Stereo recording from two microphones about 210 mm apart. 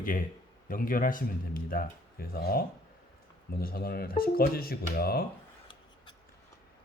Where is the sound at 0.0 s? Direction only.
40° left (ahead or behind).